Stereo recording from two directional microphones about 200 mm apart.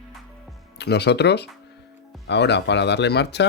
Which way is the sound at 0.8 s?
55° left (ahead or behind).